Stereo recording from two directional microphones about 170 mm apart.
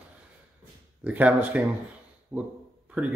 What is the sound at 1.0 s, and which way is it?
A man's voice, 10° right (ahead or behind).